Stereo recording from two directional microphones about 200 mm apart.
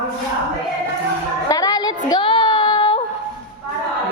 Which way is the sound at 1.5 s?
20° left (ahead or behind).